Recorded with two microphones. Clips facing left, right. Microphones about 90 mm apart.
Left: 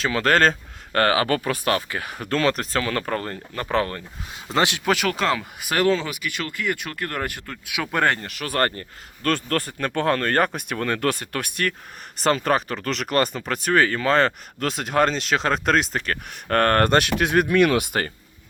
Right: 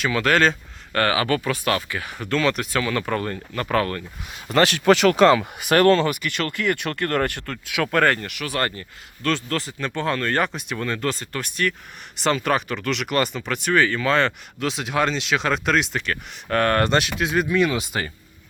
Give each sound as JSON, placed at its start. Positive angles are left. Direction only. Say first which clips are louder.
{"t": 0.0, "sound": "speech", "louder": "even", "side_deg": 35}
{"t": 4.9, "sound": "speech", "louder": "right 7 dB", "side_deg": 0}
{"t": 8.3, "sound": "speech", "louder": "left 2 dB", "side_deg": 40}
{"t": 12.1, "sound": "speech", "louder": "left 1 dB", "side_deg": 40}